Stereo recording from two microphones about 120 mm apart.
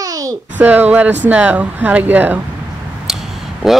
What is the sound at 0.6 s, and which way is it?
Speech, 15° right (ahead or behind).